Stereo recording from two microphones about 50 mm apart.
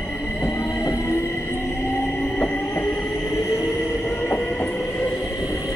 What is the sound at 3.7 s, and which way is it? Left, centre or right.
Music, left.